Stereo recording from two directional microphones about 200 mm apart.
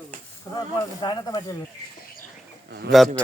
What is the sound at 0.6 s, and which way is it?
Speech, 20° left (ahead or behind).